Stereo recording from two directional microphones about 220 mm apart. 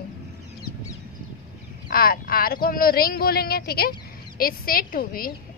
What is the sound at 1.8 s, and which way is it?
A woman's voice, 40° left (ahead or behind).